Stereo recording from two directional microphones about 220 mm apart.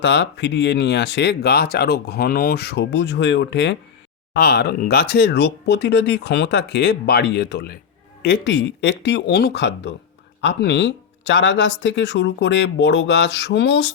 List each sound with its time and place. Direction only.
0.0 s speech: 50° left (ahead or behind)